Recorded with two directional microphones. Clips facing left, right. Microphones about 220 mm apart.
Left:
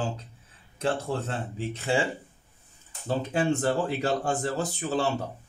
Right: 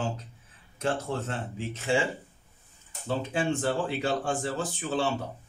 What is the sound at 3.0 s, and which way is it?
Speech, 40° left (ahead or behind).